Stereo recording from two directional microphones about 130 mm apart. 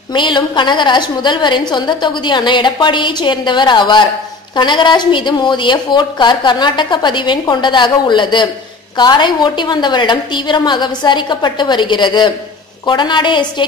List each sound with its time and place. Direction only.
0.1 s a woman's voice: 35° left (ahead or behind)